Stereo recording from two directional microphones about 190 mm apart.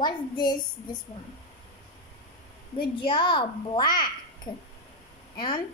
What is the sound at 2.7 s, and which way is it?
A child's voice, 25° left (ahead or behind).